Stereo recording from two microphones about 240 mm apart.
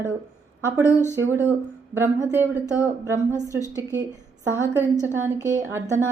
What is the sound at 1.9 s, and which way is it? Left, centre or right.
Speech, centre.